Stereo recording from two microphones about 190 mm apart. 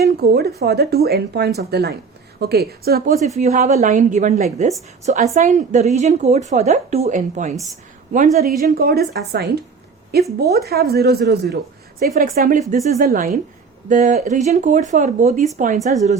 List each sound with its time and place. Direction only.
0.0 s a woman's voice: 55° right (ahead or behind)
3.2 s a woman's voice: 35° right (ahead or behind)